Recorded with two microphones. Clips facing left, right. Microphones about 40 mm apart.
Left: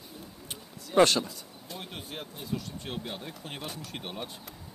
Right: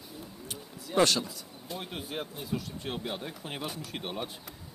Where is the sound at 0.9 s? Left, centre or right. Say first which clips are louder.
Left 3 dB; centre.